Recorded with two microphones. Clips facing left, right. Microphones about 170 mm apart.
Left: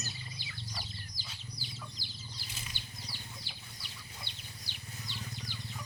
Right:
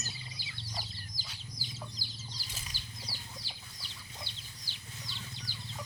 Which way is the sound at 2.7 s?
35° right (ahead or behind).